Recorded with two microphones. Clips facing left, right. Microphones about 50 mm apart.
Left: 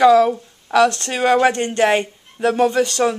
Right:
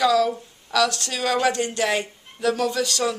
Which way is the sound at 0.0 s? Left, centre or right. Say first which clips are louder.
Left 7 dB; left.